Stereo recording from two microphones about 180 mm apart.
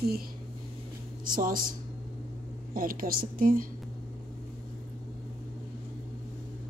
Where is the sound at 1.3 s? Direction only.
50° right (ahead or behind).